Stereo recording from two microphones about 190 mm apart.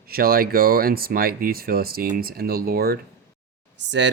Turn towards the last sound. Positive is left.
turn(degrees=-70)  # may be behind; listen again after turning